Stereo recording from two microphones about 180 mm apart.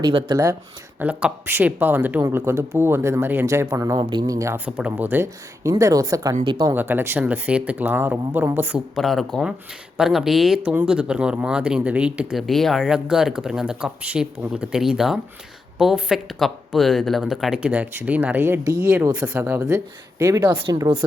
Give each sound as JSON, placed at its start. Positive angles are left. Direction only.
{"t": 0.0, "sound": "speech", "side_deg": -25}
{"t": 0.9, "sound": "speech", "side_deg": -10}
{"t": 6.7, "sound": "speech", "side_deg": -10}
{"t": 9.0, "sound": "speech", "side_deg": 0}
{"t": 20.7, "sound": "speech", "side_deg": -25}